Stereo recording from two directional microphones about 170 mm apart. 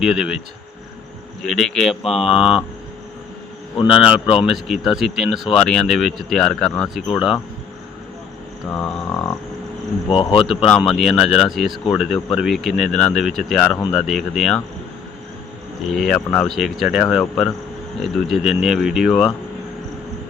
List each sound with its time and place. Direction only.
0.0 s speech: 5° right (ahead or behind)
1.4 s speech: centre (ahead or behind)
3.8 s speech: centre (ahead or behind)
8.7 s speech: 5° left (ahead or behind)
10.1 s speech: 30° left (ahead or behind)
10.7 s speech: 5° left (ahead or behind)
16.0 s speech: 5° left (ahead or behind)